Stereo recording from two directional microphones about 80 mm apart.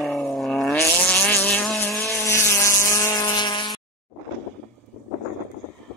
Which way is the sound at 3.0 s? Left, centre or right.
Left.